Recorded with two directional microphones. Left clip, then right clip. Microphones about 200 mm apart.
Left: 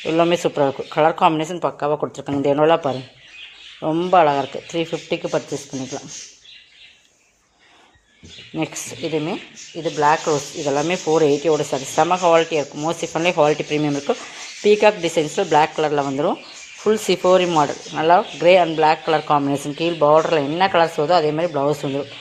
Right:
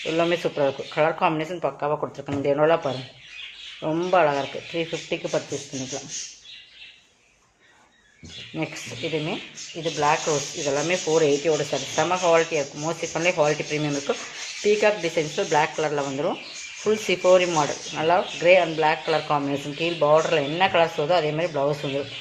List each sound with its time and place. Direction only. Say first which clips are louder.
0.0 s speech: left 5 dB; 35° left (ahead or behind)
3.8 s speech: left 5 dB; 30° left (ahead or behind)
8.5 s speech: left 5 dB; 45° left (ahead or behind)